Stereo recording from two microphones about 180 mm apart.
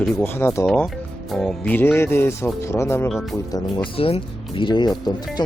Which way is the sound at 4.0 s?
30° left (ahead or behind).